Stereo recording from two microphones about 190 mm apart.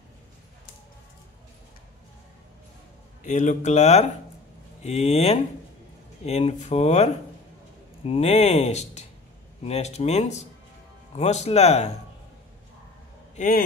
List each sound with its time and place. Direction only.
3.3 s speech: 40° left (ahead or behind)
13.4 s speech: 40° left (ahead or behind)